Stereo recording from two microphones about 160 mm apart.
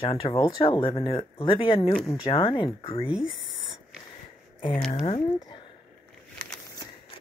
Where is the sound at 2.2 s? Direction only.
35° left (ahead or behind).